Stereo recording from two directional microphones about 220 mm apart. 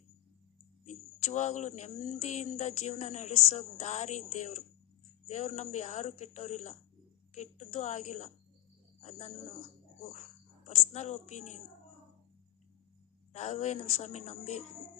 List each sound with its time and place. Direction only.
0.9 s a woman's voice: 30° left (ahead or behind)
13.3 s a woman's voice: 30° left (ahead or behind)